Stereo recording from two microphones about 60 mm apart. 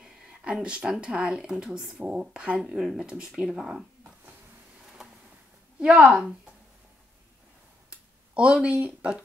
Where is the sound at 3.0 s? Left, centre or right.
Centre.